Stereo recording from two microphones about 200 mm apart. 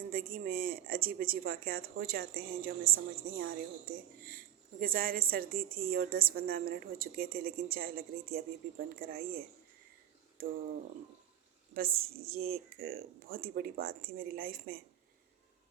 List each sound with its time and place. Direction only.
0.0 s speech: 45° right (ahead or behind)
11.7 s speech: 50° right (ahead or behind)